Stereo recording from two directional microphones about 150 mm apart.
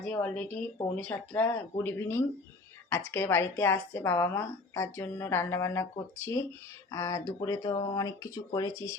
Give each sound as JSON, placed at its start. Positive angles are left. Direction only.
{"t": 0.0, "sound": "speech", "side_deg": 10}